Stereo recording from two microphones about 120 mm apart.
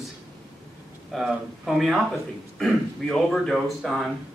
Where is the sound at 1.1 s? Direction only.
5° right (ahead or behind).